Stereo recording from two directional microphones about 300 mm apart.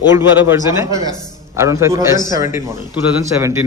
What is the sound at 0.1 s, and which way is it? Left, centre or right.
A man's voice, centre.